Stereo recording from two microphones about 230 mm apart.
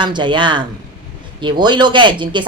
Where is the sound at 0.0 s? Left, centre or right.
Centre.